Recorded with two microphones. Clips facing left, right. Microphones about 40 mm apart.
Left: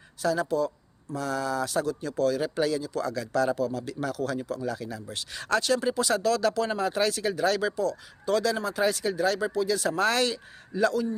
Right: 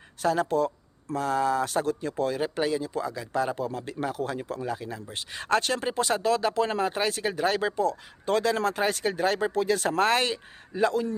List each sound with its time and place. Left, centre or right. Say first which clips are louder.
0.2 s speech: right 1 dB; right